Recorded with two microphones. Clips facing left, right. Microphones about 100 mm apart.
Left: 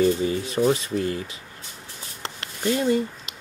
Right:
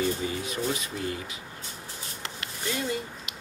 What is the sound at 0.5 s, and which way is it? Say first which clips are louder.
Speech: left 9 dB; 40° left (ahead or behind).